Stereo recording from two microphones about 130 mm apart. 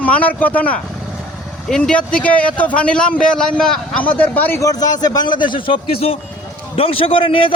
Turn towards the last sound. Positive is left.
turn(degrees=45)  # may be behind; listen again after turning